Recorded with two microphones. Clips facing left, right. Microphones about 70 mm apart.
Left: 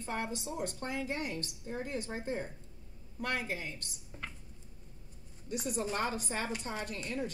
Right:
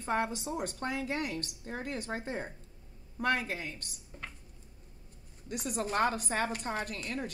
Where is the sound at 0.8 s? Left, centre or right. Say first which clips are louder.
Right 2 dB; right.